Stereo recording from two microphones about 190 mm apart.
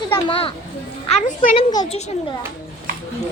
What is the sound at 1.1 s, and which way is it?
Speech, 40° left (ahead or behind).